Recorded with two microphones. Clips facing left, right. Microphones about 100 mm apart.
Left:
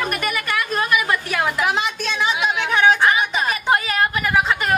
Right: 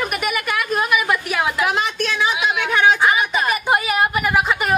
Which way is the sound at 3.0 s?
5° right (ahead or behind).